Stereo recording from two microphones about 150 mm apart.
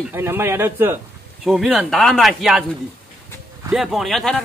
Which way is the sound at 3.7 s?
Centre (ahead or behind).